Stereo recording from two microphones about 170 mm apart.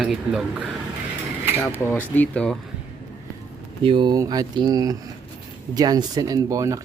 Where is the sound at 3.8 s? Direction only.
30° right (ahead or behind).